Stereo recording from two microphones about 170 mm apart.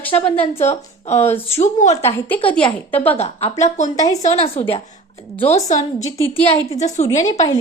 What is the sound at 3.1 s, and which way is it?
A woman's voice, 40° left (ahead or behind).